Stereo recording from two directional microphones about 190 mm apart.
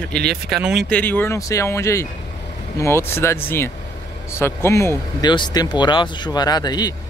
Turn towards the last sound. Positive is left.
turn(degrees=20)  # may be behind; listen again after turning